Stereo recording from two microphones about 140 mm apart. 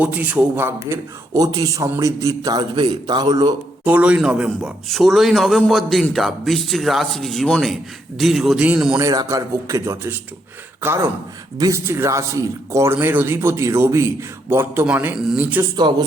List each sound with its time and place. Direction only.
0.0 s a man's voice: 10° right (ahead or behind); by 3.5 s 30° right (ahead or behind)
3.8 s a man's voice: 10° right (ahead or behind)
9.0 s a man's voice: 25° right (ahead or behind)
15.7 s speech: 30° right (ahead or behind)